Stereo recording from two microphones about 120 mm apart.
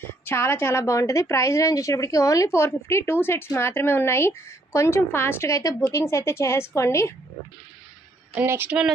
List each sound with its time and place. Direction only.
0.0 s a woman's voice: 20° left (ahead or behind)
8.4 s a woman's voice: 15° right (ahead or behind)